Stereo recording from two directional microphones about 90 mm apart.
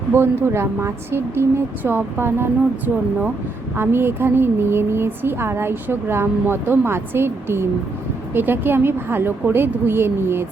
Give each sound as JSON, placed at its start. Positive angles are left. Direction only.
{"t": 0.1, "sound": "a woman's voice", "side_deg": -25}